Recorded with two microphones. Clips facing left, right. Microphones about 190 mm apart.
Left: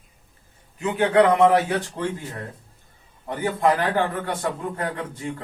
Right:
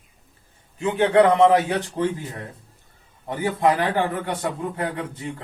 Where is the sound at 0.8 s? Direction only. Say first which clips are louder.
Right 1 dB; 25° right (ahead or behind).